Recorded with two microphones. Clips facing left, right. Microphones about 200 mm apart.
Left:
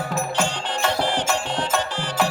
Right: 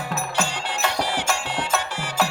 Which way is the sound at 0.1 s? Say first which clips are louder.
Left 1 dB; 5° right (ahead or behind).